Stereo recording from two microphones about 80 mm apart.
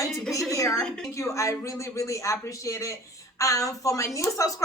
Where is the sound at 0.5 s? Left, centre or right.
Left.